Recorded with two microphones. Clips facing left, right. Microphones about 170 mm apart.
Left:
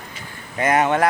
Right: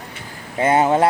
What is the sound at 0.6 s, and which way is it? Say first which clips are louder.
Speech: right 2 dB; 30° right (ahead or behind).